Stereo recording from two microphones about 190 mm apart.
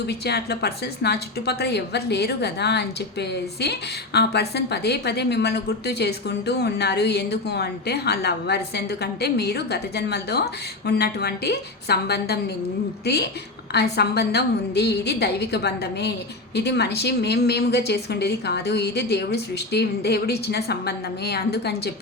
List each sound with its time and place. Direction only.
0.1 s speech: 60° left (ahead or behind)
13.7 s speech: 60° left (ahead or behind)